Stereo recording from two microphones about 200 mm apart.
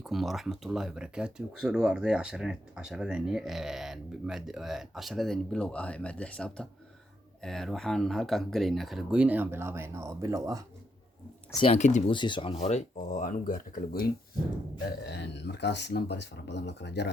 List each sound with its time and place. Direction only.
0.0 s speech: centre (ahead or behind); by 10.6 s 15° right (ahead or behind)
11.6 s speech: 35° left (ahead or behind)
12.1 s speech: 25° left (ahead or behind); by 14.1 s 45° left (ahead or behind)
15.0 s speech: 55° left (ahead or behind)